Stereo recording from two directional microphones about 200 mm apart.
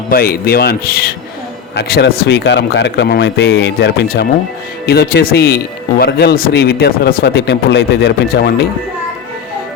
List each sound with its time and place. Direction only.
0.1 s a man's voice: 50° left (ahead or behind)